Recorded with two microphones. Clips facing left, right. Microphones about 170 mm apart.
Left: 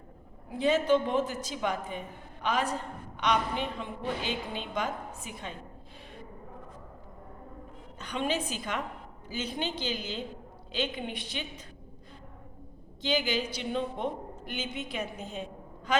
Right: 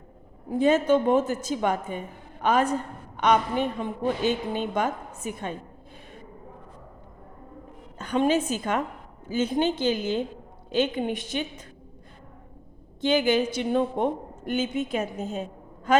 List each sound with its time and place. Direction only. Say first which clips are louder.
0.5 s a woman's voice: right 5 dB; 50° right (ahead or behind)
7.9 s a woman's voice: right 9 dB; 45° right (ahead or behind)
13.0 s a woman's voice: right 8 dB; 50° right (ahead or behind)